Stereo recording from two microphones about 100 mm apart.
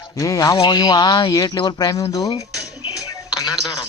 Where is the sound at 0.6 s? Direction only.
50° left (ahead or behind).